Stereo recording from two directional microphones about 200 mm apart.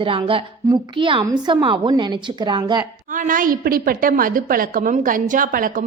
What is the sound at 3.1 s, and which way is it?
A woman's voice, 40° right (ahead or behind).